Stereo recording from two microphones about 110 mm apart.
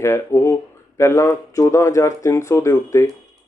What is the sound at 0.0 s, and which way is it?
Speech, 25° left (ahead or behind).